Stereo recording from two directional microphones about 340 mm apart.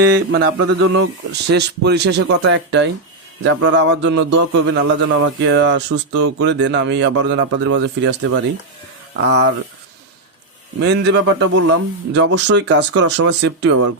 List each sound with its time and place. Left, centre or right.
0.3 s speech: right
10.8 s speech: right